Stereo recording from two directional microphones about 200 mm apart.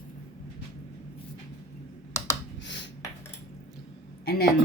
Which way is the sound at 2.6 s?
60° left (ahead or behind).